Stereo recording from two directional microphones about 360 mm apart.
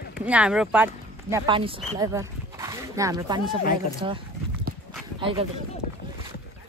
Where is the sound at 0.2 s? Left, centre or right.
Centre.